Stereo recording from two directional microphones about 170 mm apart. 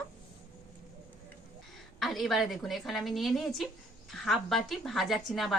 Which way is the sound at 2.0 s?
Centre (ahead or behind).